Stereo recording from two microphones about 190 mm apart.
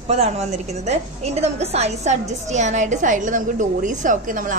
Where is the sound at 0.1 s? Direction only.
35° right (ahead or behind).